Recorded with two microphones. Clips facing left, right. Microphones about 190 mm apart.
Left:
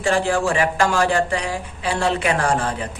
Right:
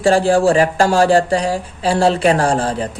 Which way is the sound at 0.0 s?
30° right (ahead or behind).